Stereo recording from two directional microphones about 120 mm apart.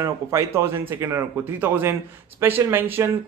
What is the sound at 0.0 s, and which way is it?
Speech, 25° right (ahead or behind).